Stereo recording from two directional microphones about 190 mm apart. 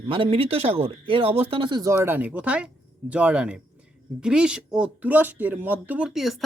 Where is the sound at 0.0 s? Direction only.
25° right (ahead or behind).